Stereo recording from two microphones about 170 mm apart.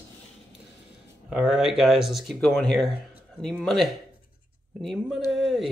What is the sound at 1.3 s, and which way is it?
Speech, 5° right (ahead or behind).